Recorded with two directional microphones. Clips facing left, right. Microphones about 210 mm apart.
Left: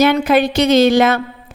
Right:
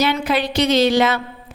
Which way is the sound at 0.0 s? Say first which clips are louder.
Left 6 dB; 50° left (ahead or behind).